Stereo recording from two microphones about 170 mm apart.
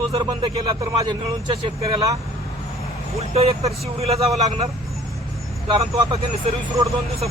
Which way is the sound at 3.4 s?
35° right (ahead or behind).